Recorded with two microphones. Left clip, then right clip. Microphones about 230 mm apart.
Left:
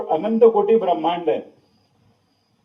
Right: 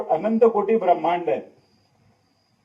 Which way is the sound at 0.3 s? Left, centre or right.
Left.